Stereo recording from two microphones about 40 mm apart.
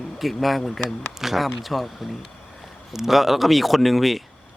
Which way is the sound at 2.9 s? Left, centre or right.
Centre.